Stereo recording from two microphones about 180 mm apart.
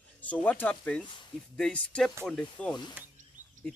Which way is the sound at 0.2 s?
10° left (ahead or behind).